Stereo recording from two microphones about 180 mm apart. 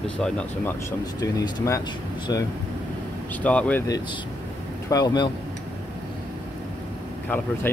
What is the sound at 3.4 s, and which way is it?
Speech, 10° left (ahead or behind).